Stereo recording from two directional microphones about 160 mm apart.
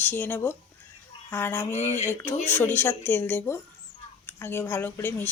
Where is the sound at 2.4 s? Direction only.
15° left (ahead or behind).